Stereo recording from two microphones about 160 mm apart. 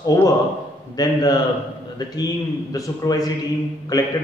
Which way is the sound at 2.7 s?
20° left (ahead or behind).